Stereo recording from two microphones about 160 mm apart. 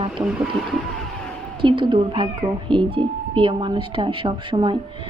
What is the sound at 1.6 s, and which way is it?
A woman's voice, 30° right (ahead or behind).